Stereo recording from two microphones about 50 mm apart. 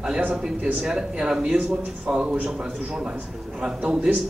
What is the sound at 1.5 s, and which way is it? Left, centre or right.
Speech, right.